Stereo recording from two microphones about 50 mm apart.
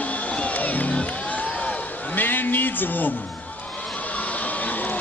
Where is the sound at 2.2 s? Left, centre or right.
Left.